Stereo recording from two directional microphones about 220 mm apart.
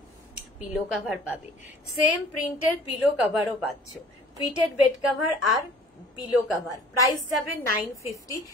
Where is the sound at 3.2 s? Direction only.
Centre (ahead or behind).